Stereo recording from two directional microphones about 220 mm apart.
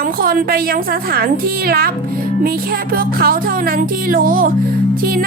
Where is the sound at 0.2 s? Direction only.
40° right (ahead or behind).